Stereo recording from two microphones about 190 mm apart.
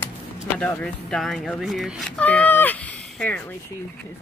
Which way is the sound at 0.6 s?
5° left (ahead or behind).